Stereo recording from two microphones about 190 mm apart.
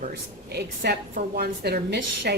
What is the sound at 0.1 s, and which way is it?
A woman's voice, 60° right (ahead or behind).